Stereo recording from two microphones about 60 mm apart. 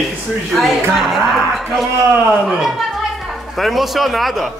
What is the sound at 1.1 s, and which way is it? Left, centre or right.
Speech, centre.